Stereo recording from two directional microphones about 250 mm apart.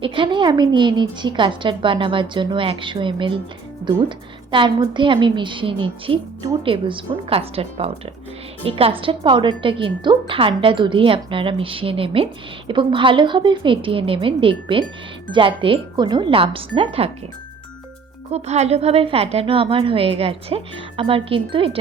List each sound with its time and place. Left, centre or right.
0.0 s a woman's voice: centre
4.5 s a woman's voice: centre
18.3 s a woman's voice: right